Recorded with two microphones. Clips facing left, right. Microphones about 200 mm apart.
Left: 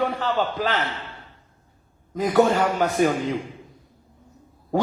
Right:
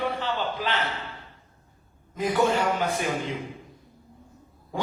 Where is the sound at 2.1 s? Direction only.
45° left (ahead or behind).